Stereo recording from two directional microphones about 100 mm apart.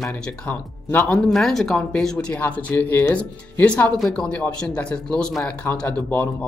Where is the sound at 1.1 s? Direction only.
Centre (ahead or behind).